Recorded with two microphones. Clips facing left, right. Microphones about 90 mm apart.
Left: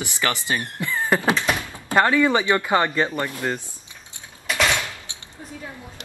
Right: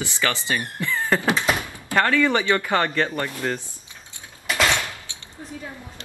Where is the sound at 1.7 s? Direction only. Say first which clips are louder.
Left 2 dB; 20° left (ahead or behind).